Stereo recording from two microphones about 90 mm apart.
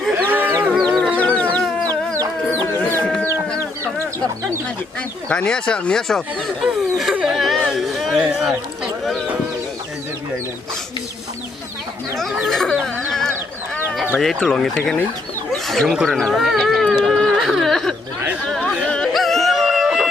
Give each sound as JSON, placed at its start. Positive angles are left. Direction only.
{"t": 0.3, "sound": "sheep", "side_deg": -20}
{"t": 0.8, "sound": "music", "side_deg": 5}
{"t": 1.1, "sound": "chicken", "side_deg": 15}
{"t": 2.6, "sound": "a sound", "side_deg": 25}
{"t": 5.3, "sound": "speech", "side_deg": 10}
{"t": 7.2, "sound": "a sound", "side_deg": -5}
{"t": 8.2, "sound": "a sound", "side_deg": -10}
{"t": 8.4, "sound": "run", "side_deg": 0}
{"t": 12.4, "sound": "chicken", "side_deg": 5}
{"t": 14.4, "sound": "speech", "side_deg": 5}
{"t": 15.5, "sound": "a sound", "side_deg": 0}
{"t": 18.5, "sound": "music", "side_deg": 10}